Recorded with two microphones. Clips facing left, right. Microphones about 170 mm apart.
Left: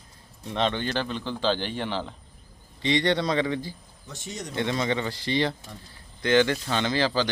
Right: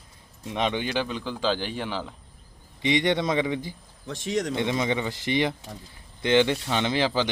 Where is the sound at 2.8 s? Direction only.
15° right (ahead or behind).